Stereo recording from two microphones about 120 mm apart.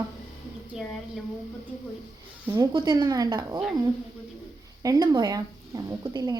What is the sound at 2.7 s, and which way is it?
Speech, 35° right (ahead or behind).